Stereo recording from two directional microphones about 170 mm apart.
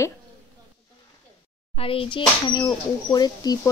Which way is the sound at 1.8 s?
35° left (ahead or behind).